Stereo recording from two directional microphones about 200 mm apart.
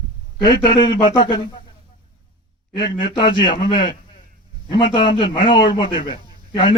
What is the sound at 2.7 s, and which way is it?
Speech, 20° left (ahead or behind).